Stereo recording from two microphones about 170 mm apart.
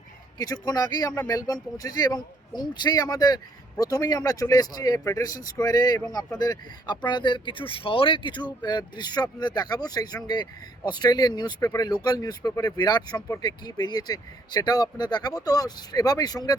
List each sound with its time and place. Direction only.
0.3 s speech: 20° left (ahead or behind)